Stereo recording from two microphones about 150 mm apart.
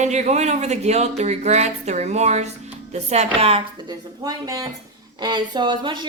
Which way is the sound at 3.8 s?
25° right (ahead or behind).